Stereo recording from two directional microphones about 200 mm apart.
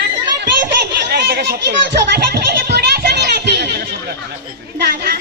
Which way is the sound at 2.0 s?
55° right (ahead or behind).